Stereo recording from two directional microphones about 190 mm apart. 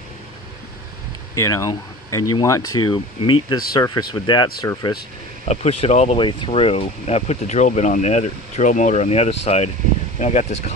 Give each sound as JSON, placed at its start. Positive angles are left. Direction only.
{"t": 1.3, "sound": "speech", "side_deg": 15}
{"t": 5.4, "sound": "speech", "side_deg": 35}